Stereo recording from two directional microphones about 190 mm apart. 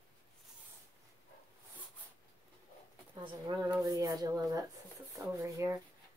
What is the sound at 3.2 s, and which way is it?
Speech, 20° right (ahead or behind).